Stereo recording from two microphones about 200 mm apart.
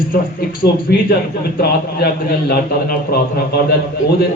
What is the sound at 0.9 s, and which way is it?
Speech, 50° left (ahead or behind).